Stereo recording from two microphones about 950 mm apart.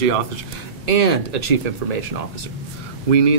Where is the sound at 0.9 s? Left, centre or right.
Right.